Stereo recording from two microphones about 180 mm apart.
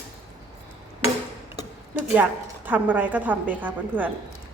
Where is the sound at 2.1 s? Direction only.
10° right (ahead or behind).